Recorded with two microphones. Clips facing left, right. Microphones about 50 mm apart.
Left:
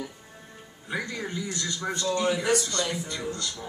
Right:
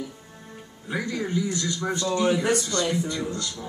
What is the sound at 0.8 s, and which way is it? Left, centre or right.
Speech, centre.